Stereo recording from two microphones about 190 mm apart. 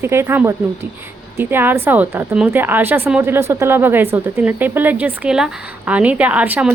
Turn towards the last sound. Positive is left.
turn(degrees=-10)  # may be behind; listen again after turning